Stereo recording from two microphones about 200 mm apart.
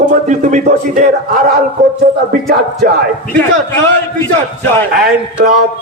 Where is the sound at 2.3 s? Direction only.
50° right (ahead or behind).